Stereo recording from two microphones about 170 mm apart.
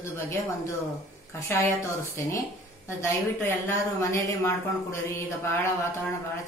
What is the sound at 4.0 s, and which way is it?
Speech, 20° left (ahead or behind).